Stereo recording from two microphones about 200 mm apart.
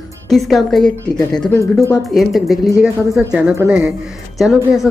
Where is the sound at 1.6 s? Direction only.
15° left (ahead or behind).